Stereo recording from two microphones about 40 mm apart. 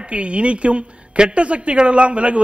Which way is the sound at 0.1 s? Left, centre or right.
Right.